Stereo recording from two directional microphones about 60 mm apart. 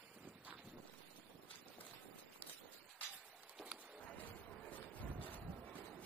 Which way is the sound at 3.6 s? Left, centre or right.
Right.